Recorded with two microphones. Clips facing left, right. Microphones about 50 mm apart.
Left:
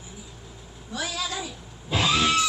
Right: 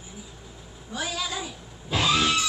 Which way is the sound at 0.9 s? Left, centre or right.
Centre.